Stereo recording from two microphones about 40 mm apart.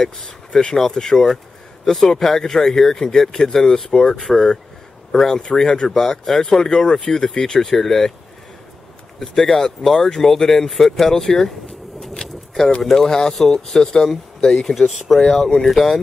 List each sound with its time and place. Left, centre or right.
0.0 s speech: centre
5.9 s speech: centre
6.4 s speech: centre
7.6 s speech: centre
9.2 s speech: centre
12.2 s keys jangling: left
12.9 s speech: centre
14.8 s speech: centre
15.3 s speech: centre